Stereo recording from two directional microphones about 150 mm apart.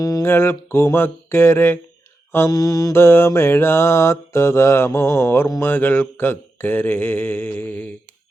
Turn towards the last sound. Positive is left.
turn(degrees=10)  # may be behind; listen again after turning